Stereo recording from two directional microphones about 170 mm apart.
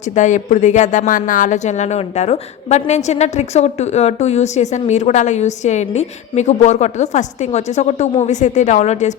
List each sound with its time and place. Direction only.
0.2 s speech: 45° left (ahead or behind)